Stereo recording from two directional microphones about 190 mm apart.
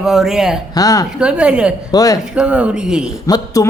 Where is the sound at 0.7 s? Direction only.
20° left (ahead or behind).